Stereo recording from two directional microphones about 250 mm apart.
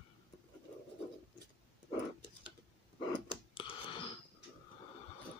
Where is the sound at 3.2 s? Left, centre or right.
Centre.